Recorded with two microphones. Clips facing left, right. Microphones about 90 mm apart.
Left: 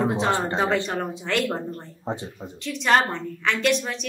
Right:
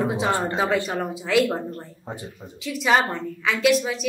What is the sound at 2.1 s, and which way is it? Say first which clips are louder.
Speech: left 6 dB; 25° left (ahead or behind).